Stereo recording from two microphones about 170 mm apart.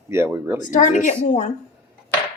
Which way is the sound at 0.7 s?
50° left (ahead or behind).